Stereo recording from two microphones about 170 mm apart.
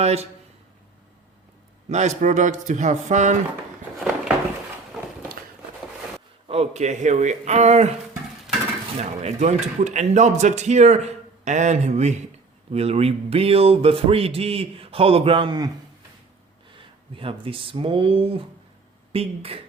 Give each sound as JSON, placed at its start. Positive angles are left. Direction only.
{"t": 0.0, "sound": "speech", "side_deg": -40}
{"t": 1.9, "sound": "speech", "side_deg": -40}
{"t": 4.9, "sound": "a sound", "side_deg": 0}
{"t": 6.5, "sound": "speech", "side_deg": -40}
{"t": 9.0, "sound": "speech", "side_deg": -40}
{"t": 16.7, "sound": "speech", "side_deg": -30}